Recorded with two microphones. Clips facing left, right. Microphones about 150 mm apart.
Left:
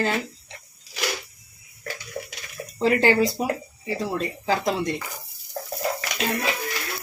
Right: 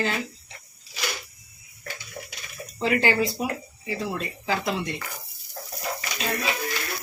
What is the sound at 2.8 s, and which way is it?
Speech, 40° left (ahead or behind).